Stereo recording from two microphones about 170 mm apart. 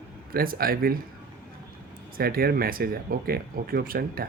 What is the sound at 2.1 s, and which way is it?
Speech, 60° right (ahead or behind).